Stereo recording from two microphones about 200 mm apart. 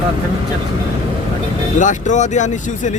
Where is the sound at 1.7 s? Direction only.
40° left (ahead or behind).